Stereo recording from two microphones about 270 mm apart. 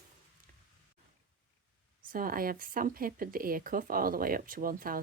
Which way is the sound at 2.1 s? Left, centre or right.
Right.